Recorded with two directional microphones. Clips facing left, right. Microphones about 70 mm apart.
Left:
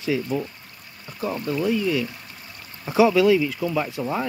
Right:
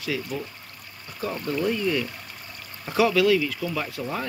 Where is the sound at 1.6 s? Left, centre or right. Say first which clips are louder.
Left 2 dB; centre.